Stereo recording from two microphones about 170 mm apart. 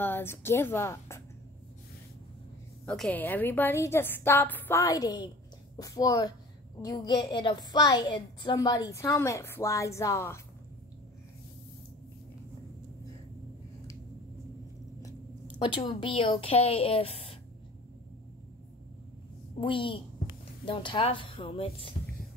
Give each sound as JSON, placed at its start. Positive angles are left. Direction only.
{"t": 0.0, "sound": "a woman's voice", "side_deg": 15}
{"t": 2.8, "sound": "a woman's voice", "side_deg": 5}
{"t": 15.6, "sound": "a woman's voice", "side_deg": 30}
{"t": 19.6, "sound": "a woman's voice", "side_deg": 30}